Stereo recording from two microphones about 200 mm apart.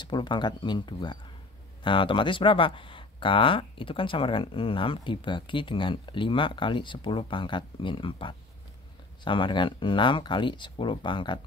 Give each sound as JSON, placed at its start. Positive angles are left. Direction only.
{"t": 0.0, "sound": "speech", "side_deg": 20}